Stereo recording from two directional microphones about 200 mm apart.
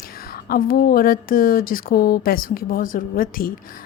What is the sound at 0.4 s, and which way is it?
Speech, 45° left (ahead or behind).